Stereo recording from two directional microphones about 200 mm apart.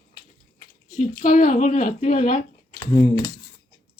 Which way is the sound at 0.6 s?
40° left (ahead or behind).